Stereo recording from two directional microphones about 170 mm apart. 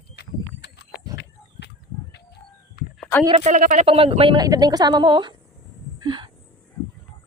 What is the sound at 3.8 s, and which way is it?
A woman's voice, 35° right (ahead or behind).